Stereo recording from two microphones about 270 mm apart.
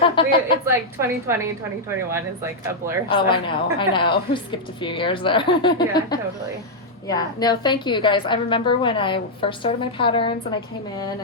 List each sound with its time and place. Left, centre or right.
0.0 s a woman's voice: centre
0.6 s speech: centre
3.1 s a woman's voice: centre